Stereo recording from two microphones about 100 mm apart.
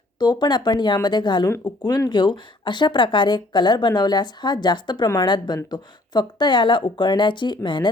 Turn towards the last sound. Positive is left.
turn(degrees=50)  # may be behind; listen again after turning